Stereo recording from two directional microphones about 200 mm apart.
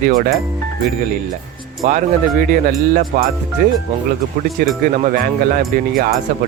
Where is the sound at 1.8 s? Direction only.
40° right (ahead or behind).